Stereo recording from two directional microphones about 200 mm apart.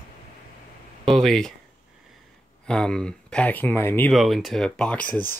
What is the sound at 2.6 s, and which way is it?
Speech, 5° left (ahead or behind).